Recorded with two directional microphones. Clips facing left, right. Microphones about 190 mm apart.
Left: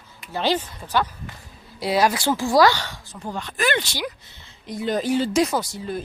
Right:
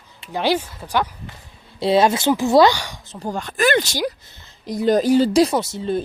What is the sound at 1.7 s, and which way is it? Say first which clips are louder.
Speech: right 4 dB; 25° right (ahead or behind).